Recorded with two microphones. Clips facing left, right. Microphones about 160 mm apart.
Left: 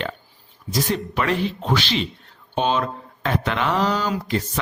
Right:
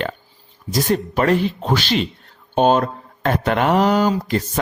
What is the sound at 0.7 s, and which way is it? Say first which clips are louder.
Speech: right 4 dB; 40° right (ahead or behind).